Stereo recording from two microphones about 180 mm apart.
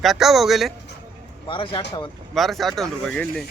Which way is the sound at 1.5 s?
30° left (ahead or behind).